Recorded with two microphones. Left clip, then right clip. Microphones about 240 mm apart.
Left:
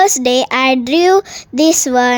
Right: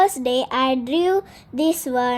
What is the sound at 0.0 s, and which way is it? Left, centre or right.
A woman's voice, left.